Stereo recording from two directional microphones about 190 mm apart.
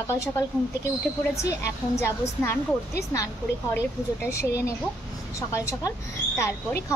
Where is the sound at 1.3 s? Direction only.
15° left (ahead or behind).